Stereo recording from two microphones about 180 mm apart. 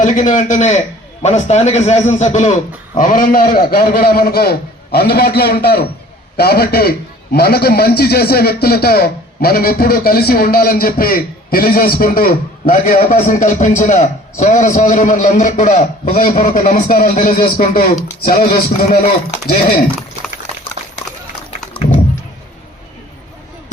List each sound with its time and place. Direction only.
0.0 s a man's voice: 45° left (ahead or behind)